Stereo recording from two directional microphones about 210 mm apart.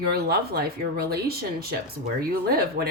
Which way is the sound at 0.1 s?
50° right (ahead or behind).